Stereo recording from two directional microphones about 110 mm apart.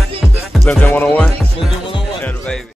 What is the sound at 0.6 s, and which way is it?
Speech, 15° left (ahead or behind).